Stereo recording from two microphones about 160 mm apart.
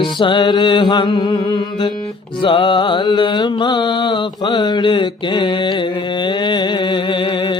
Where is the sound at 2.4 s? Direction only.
30° left (ahead or behind).